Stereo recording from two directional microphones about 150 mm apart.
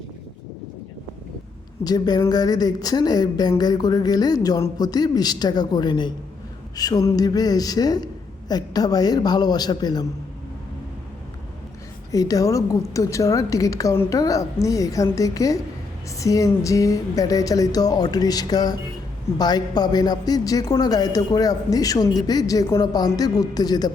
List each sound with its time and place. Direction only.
1.8 s a man's voice: 25° left (ahead or behind)
12.1 s a man's voice: 25° left (ahead or behind)